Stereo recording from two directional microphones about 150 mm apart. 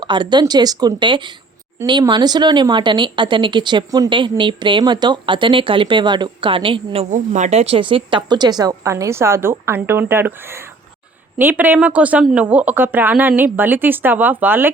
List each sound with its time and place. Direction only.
0.0 s a woman's voice: 30° right (ahead or behind)
7.1 s a woman's voice: 50° right (ahead or behind); by 14.7 s 15° right (ahead or behind)